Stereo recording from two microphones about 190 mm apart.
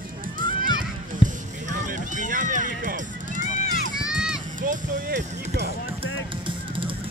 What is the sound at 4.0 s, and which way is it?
Run, 5° right (ahead or behind).